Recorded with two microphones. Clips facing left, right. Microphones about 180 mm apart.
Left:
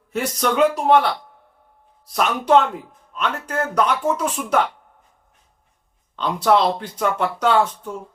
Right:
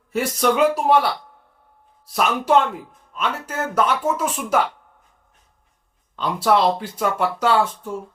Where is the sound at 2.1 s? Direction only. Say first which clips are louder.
Left 1 dB; 5° right (ahead or behind).